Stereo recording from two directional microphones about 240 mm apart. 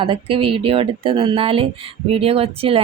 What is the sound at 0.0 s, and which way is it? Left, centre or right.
Speech, right.